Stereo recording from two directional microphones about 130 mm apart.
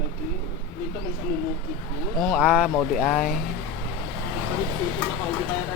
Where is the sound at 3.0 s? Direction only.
10° left (ahead or behind).